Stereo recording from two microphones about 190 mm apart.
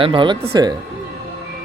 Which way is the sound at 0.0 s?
25° right (ahead or behind).